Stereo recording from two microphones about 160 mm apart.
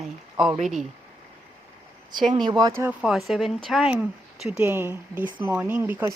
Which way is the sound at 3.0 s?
Centre (ahead or behind).